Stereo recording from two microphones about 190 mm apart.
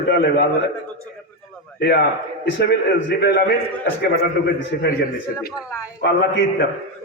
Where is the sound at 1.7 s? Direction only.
60° left (ahead or behind).